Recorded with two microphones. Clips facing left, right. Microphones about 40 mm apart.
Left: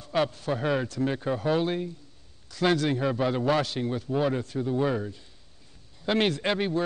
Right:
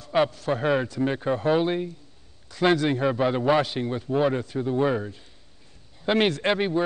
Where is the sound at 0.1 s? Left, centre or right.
Centre.